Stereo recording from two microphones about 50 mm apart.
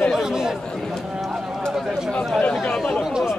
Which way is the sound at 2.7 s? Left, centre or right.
Centre.